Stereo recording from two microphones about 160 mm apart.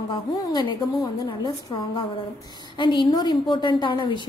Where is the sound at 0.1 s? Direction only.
30° left (ahead or behind).